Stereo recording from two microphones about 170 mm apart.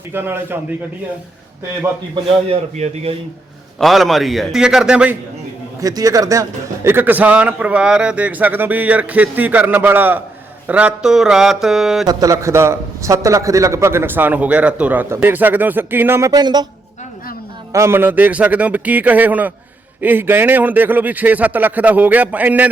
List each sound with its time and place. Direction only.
0.1 s a man's voice: 15° right (ahead or behind)
2.2 s a man's voice: 40° right (ahead or behind)
3.8 s speech: centre (ahead or behind)
5.8 s a man's voice: 20° right (ahead or behind); by 12.0 s centre (ahead or behind)
12.0 s a man's voice: 20° right (ahead or behind)
17.7 s a man's voice: 15° right (ahead or behind)